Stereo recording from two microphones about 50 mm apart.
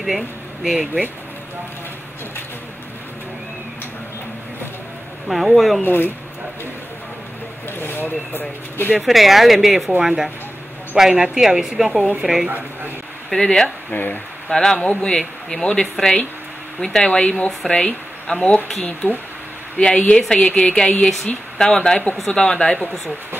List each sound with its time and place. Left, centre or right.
0.7 s a woman's voice: centre
5.3 s speech: centre
5.9 s speech: left
7.8 s speech: left
9.0 s a woman's voice: centre
12.4 s speech: right
13.3 s speech: centre
13.9 s speech: left
14.5 s speech: centre
20.0 s speech: left